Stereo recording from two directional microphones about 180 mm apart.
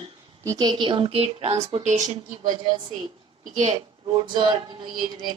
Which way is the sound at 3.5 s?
40° right (ahead or behind).